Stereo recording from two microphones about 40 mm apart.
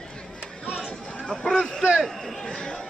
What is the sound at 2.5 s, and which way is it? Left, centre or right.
Chatter, left.